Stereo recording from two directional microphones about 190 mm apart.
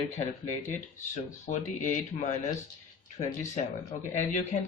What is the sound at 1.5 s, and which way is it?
Speech, 40° left (ahead or behind).